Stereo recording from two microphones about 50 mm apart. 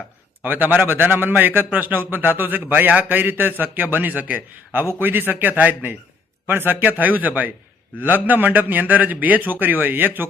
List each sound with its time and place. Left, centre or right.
0.4 s a man's voice: right
6.5 s a man's voice: right